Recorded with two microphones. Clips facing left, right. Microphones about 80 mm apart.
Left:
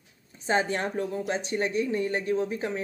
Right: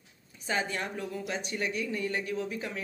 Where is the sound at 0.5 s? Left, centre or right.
Left.